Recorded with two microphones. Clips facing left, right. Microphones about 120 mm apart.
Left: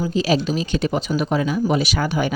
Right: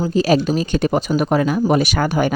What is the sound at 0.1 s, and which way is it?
Speech, 45° right (ahead or behind).